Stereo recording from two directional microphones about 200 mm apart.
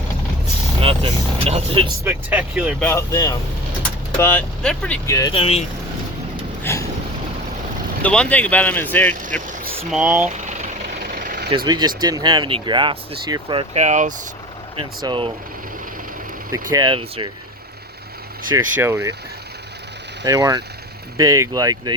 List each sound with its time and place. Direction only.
0.8 s speech: 30° right (ahead or behind)
2.0 s speech: 5° right (ahead or behind)
2.8 s speech: 15° left (ahead or behind)
5.3 s speech: 30° left (ahead or behind)
6.6 s a sound: 10° left (ahead or behind)
8.0 s speech: 5° left (ahead or behind)
9.7 s speech: 5° right (ahead or behind)
10.2 s vehicle: 35° right (ahead or behind)
11.5 s speech: 20° right (ahead or behind)
14.8 s speech: 25° right (ahead or behind)
16.7 s speech: 25° right (ahead or behind)
18.5 s speech: 10° right (ahead or behind)
20.2 s speech: 20° right (ahead or behind)